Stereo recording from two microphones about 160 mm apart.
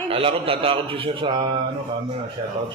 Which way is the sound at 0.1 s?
35° right (ahead or behind).